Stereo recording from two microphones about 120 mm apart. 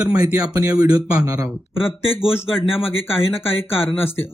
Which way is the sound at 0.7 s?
30° right (ahead or behind).